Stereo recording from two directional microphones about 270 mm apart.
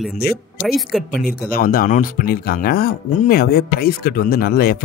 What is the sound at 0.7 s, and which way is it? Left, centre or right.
Speech, centre.